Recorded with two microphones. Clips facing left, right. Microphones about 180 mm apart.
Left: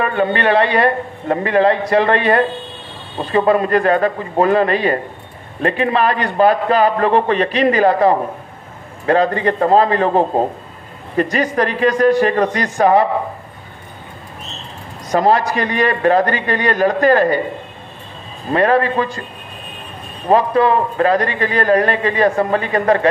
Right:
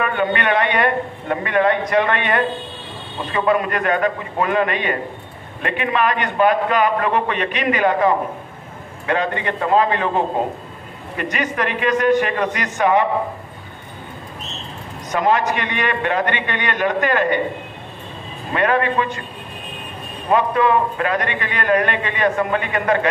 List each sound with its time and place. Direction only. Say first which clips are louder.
0.0 s a man's voice: left 3 dB; 35° left (ahead or behind)
15.0 s a man's voice: left 4 dB; 35° left (ahead or behind)
18.5 s a man's voice: left 4 dB; 35° left (ahead or behind)
20.2 s a man's voice: left 4 dB; 35° left (ahead or behind)